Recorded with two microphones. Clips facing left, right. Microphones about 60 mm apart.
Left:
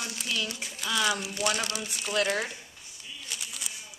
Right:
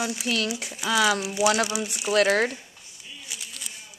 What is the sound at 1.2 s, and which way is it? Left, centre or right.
Speech, centre.